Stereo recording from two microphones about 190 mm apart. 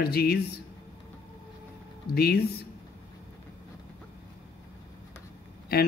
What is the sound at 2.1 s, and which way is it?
Speech, 55° left (ahead or behind).